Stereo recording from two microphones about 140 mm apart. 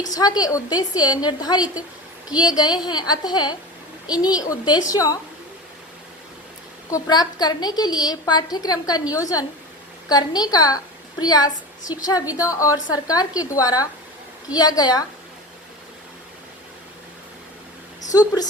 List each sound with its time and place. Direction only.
0.1 s a woman's voice: 25° left (ahead or behind)
6.9 s a woman's voice: 30° left (ahead or behind)
18.1 s a woman's voice: 25° left (ahead or behind)